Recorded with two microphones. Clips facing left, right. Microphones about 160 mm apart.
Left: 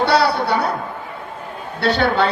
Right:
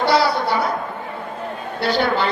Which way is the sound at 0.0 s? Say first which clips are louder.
Left 1 dB; 70° left (ahead or behind).